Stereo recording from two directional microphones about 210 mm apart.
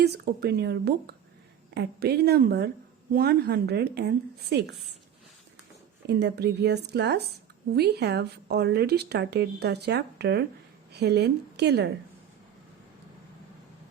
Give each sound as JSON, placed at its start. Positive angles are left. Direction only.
{"t": 0.0, "sound": "speech", "side_deg": -50}
{"t": 6.1, "sound": "speech", "side_deg": -50}